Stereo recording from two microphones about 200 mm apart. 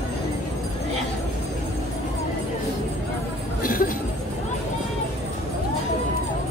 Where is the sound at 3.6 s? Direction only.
45° left (ahead or behind).